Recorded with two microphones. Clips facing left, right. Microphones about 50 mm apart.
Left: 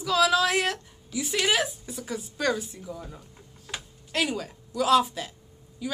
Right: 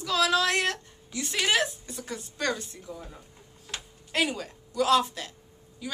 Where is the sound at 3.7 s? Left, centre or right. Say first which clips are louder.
Left 2 dB; centre.